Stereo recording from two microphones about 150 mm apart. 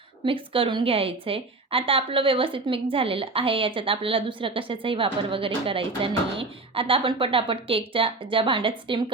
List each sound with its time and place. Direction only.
0.3 s a woman's voice: 35° right (ahead or behind)